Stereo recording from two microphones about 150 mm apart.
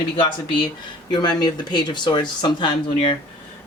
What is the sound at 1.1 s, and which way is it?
A woman's voice, 30° left (ahead or behind).